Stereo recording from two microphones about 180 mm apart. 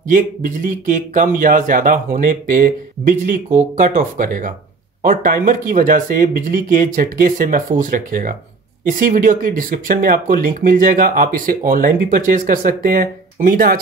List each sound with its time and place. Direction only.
0.1 s speech: 50° right (ahead or behind)